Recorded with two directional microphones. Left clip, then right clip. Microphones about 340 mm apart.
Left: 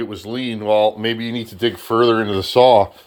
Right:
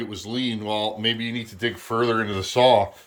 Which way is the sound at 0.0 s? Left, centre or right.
Centre.